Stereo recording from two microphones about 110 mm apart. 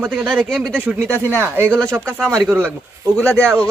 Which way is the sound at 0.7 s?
10° right (ahead or behind).